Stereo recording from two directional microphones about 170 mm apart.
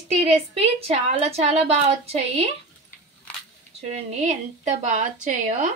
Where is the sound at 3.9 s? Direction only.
40° right (ahead or behind).